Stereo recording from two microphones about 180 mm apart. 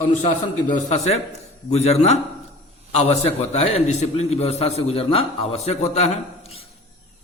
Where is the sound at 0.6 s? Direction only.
40° left (ahead or behind).